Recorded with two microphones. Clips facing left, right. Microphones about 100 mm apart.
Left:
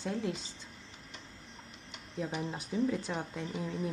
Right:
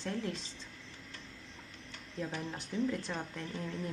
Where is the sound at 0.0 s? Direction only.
10° left (ahead or behind).